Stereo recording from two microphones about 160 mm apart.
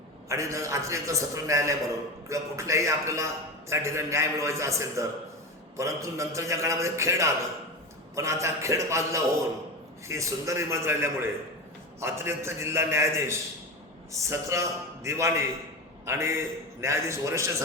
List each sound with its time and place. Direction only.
0.3 s a man's voice: 20° right (ahead or behind)